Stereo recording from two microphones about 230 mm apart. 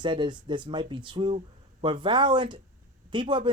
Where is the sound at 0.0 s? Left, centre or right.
Right.